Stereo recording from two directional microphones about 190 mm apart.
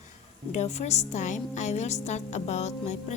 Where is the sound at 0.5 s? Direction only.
35° left (ahead or behind).